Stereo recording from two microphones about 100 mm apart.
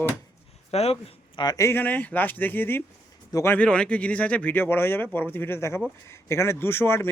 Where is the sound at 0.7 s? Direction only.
90° left.